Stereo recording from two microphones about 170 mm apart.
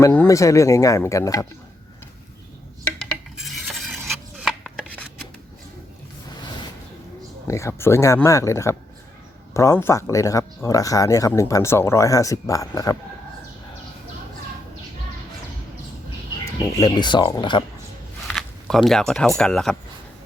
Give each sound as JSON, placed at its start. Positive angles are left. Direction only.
{"t": 0.0, "sound": "speech", "side_deg": 15}
{"t": 3.0, "sound": "dishes", "side_deg": 0}
{"t": 7.4, "sound": "speech", "side_deg": 15}
{"t": 16.6, "sound": "speech", "side_deg": 25}
{"t": 18.3, "sound": "a sound", "side_deg": 0}
{"t": 19.4, "sound": "speech", "side_deg": 5}